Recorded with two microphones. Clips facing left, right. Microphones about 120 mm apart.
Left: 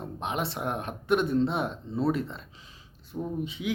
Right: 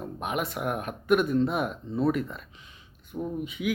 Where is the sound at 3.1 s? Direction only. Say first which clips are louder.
Right 1 dB; 5° left (ahead or behind).